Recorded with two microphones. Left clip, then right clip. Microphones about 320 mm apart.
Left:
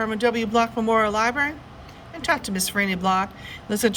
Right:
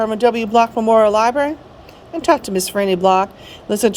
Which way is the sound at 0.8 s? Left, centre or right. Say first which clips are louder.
Right 9 dB; right.